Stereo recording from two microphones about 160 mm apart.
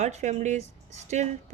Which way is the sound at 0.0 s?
45° right (ahead or behind).